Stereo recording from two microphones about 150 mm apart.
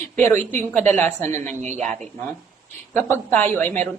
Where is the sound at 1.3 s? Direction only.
50° right (ahead or behind).